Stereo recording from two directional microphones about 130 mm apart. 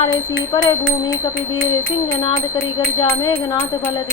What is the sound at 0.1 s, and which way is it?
Speech, 30° left (ahead or behind).